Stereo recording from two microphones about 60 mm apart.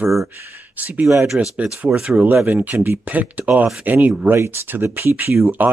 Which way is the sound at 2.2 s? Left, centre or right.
Right.